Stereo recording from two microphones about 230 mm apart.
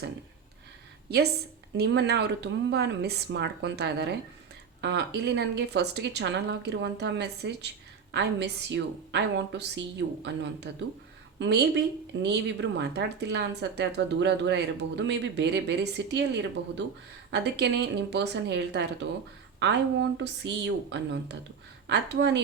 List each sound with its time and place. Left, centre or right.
1.7 s speech: right